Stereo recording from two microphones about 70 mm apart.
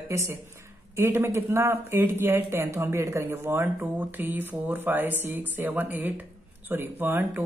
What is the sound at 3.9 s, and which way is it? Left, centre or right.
Speech, right.